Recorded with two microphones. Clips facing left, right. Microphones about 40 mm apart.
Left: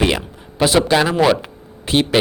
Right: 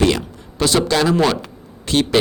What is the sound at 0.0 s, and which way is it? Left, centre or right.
Speech, centre.